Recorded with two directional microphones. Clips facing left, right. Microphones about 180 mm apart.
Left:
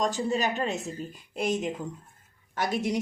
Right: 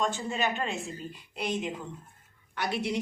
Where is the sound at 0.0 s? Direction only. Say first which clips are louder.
Left 3 dB; 40° left (ahead or behind).